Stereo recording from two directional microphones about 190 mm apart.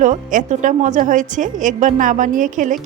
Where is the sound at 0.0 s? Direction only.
40° right (ahead or behind).